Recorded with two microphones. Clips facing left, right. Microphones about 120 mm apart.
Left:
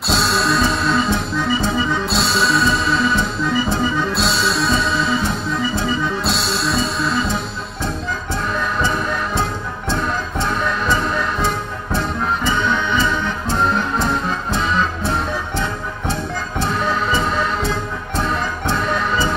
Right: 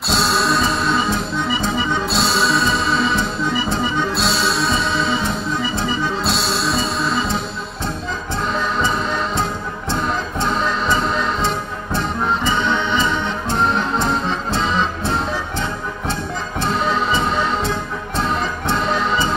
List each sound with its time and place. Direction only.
0.1 s music: centre (ahead or behind)
13.6 s music: 20° right (ahead or behind)